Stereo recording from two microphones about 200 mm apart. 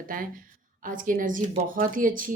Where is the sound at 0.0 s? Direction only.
45° right (ahead or behind).